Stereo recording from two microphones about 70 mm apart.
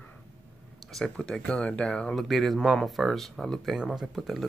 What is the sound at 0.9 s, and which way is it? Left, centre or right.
Speech, centre.